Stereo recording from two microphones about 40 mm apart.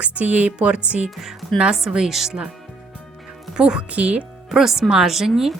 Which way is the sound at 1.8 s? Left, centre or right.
Centre.